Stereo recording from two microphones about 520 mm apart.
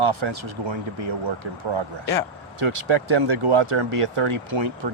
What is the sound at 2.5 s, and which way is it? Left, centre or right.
Speech, right.